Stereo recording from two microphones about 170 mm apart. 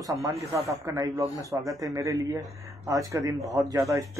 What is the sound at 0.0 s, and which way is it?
Speech, 20° right (ahead or behind).